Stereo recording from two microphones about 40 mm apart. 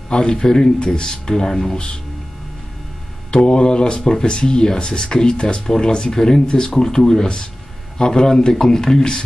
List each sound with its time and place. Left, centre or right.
0.1 s speech: left
3.3 s speech: left